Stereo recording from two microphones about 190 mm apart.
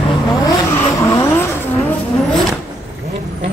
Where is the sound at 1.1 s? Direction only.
15° left (ahead or behind).